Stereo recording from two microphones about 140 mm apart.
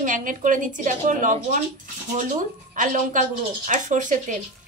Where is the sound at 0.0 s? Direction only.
70° right (ahead or behind).